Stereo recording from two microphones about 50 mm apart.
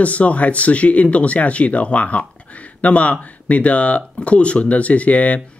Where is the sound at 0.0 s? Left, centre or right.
Left.